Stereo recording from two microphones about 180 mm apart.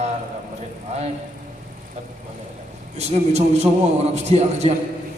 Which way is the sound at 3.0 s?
35° right (ahead or behind).